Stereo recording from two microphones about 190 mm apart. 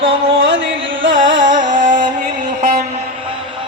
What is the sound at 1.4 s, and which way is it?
Music, 45° right (ahead or behind).